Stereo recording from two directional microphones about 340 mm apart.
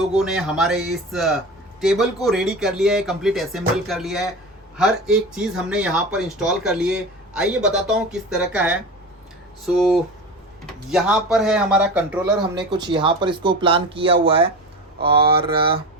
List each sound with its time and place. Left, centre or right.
0.2 s speech: centre